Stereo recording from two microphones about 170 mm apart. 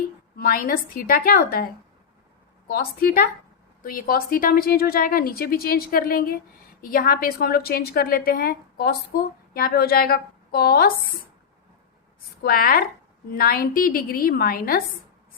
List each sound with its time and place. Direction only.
0.3 s a woman's voice: 60° left (ahead or behind)
12.4 s a woman's voice: 60° left (ahead or behind)